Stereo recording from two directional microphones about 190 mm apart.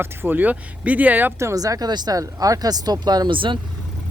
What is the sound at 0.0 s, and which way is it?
Speech, 10° right (ahead or behind).